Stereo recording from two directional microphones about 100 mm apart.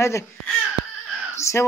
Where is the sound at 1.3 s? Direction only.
30° left (ahead or behind).